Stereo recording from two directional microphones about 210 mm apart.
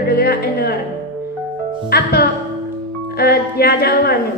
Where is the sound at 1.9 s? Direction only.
50° left (ahead or behind).